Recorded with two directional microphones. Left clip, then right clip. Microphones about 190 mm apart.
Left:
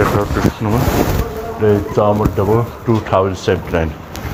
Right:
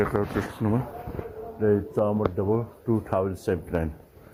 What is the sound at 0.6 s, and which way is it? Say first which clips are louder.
Speech: left 14 dB; 65° right (ahead or behind).